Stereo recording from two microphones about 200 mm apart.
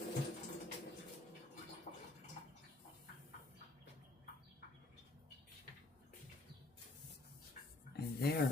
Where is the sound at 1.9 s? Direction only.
35° left (ahead or behind).